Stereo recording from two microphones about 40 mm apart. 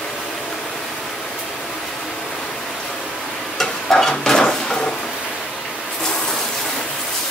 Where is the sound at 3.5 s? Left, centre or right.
Centre.